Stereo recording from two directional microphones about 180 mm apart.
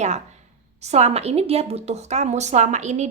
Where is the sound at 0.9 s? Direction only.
35° right (ahead or behind).